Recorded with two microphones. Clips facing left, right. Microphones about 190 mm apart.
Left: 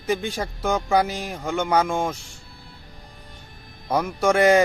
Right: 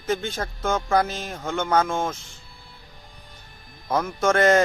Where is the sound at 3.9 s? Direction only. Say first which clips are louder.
Left 1 dB; 15° left (ahead or behind).